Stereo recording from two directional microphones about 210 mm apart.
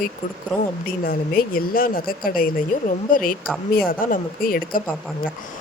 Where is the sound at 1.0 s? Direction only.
45° left (ahead or behind).